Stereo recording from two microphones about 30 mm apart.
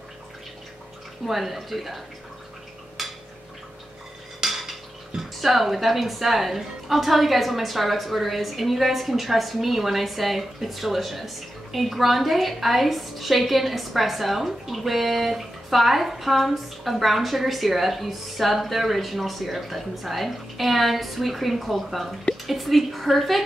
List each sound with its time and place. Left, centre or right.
1.2 s speech: centre
3.0 s a sound: centre
4.4 s speech: centre